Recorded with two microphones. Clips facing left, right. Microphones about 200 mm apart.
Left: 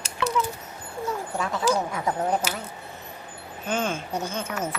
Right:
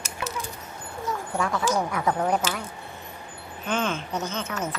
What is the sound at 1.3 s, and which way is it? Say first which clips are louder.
Speech: even; 20° left (ahead or behind).